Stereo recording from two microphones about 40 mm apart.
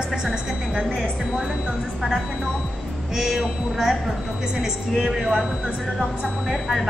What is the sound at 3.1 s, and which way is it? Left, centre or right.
A woman's voice, centre.